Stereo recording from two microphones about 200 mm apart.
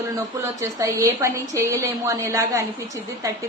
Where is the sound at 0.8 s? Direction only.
15° right (ahead or behind).